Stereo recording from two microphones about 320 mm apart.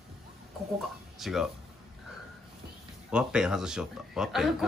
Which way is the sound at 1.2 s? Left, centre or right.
Centre.